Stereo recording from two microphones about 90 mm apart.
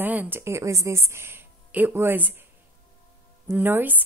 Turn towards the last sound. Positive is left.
turn(degrees=-20)  # may be behind; listen again after turning